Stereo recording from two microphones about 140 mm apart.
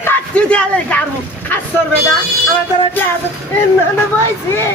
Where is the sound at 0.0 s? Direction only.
10° left (ahead or behind).